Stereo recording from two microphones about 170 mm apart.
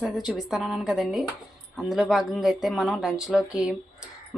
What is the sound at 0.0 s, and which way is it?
Speech, centre (ahead or behind).